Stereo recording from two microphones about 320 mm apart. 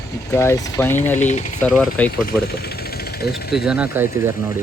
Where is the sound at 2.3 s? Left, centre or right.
Left.